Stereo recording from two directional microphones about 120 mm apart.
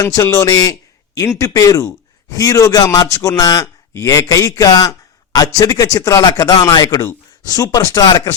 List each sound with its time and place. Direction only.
0.0 s a man's voice: 30° left (ahead or behind)